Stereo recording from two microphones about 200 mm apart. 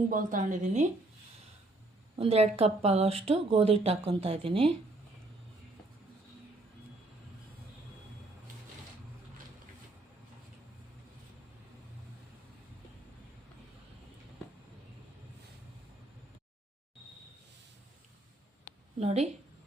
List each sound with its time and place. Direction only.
0.1 s a woman's voice: 40° right (ahead or behind)
2.1 s speech: 30° right (ahead or behind)
18.9 s a woman's voice: 30° right (ahead or behind)